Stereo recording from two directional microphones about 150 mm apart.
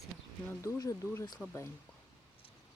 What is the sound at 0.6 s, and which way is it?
Speech, 20° left (ahead or behind).